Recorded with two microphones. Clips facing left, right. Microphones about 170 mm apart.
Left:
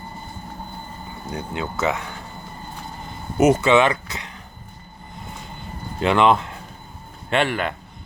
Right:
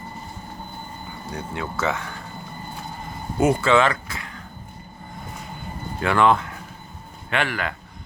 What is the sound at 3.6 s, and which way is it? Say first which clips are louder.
Speech: left 2 dB; 20° left (ahead or behind).